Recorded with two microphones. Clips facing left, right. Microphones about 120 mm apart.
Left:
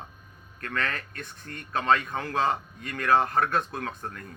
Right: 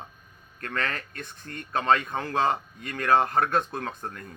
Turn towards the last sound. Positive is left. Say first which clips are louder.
# right 1 dB
turn(degrees=-30)  # may be behind; listen again after turning